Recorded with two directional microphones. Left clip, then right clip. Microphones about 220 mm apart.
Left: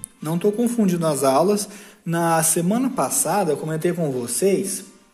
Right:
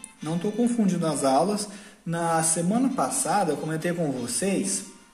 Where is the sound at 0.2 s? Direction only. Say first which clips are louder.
Left 6 dB; 35° left (ahead or behind).